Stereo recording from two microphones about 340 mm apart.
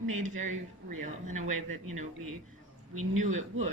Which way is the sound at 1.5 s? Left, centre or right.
Right.